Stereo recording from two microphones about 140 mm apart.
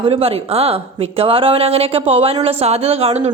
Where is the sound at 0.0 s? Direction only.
45° right (ahead or behind).